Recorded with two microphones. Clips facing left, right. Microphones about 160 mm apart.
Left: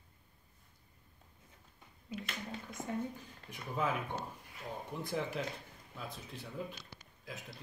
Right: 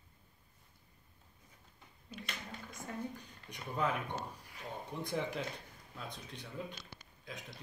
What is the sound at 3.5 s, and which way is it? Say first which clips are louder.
Speech: even; centre (ahead or behind).